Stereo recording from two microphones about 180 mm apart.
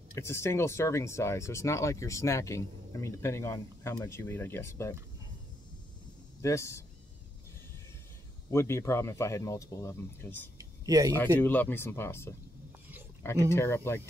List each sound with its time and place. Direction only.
0.1 s speech: 15° left (ahead or behind)
6.4 s speech: 15° left (ahead or behind)
8.5 s speech: 15° left (ahead or behind)
10.6 s a sound: 20° right (ahead or behind)
11.3 s speech: 10° left (ahead or behind)
13.5 s speech: 15° left (ahead or behind)